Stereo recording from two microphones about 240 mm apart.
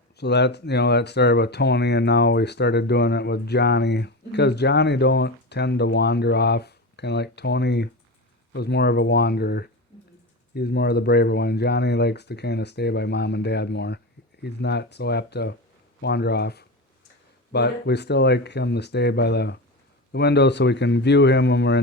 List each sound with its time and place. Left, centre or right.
0.2 s speech: left